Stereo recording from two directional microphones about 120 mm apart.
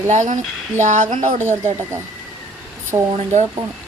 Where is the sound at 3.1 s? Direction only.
80° right.